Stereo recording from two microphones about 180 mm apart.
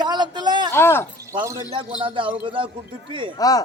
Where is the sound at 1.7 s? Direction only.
30° right (ahead or behind).